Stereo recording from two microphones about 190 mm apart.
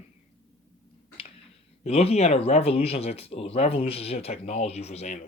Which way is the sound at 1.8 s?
30° left (ahead or behind).